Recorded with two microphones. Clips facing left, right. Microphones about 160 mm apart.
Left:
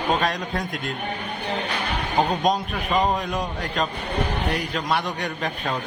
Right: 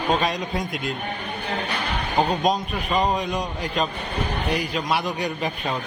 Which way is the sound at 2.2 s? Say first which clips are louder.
Even; centre (ahead or behind).